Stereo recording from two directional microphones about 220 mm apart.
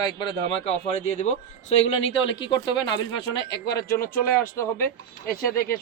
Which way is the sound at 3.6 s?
45° left (ahead or behind).